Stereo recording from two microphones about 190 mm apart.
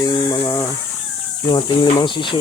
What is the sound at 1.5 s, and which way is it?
Speech, 25° left (ahead or behind).